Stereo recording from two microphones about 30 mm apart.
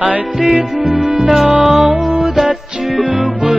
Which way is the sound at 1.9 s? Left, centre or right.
Right.